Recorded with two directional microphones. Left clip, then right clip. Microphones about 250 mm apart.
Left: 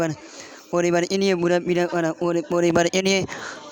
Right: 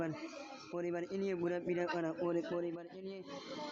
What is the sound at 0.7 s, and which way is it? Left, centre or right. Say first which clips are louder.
A man's voice: left 19 dB; left.